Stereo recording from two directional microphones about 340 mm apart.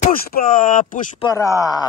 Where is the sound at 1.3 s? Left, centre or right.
Centre.